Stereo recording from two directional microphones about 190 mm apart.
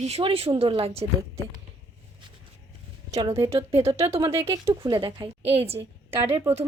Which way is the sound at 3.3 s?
30° right (ahead or behind).